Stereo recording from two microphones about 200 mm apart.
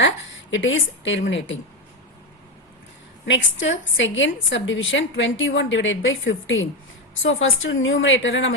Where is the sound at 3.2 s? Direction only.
70° left (ahead or behind).